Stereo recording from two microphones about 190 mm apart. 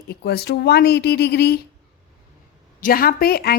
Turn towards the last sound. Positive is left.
turn(degrees=55)  # may be behind; listen again after turning